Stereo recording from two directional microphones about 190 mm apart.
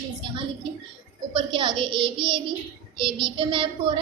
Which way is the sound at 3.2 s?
25° right (ahead or behind).